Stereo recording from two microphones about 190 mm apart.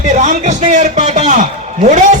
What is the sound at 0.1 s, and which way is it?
Speech, 40° right (ahead or behind).